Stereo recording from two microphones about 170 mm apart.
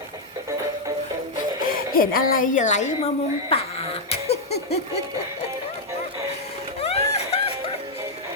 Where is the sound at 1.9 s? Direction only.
60° left (ahead or behind).